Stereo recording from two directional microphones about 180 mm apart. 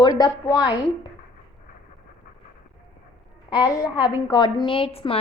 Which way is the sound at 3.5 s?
20° left (ahead or behind).